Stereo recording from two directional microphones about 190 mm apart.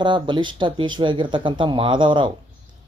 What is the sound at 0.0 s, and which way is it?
Speech, 25° right (ahead or behind).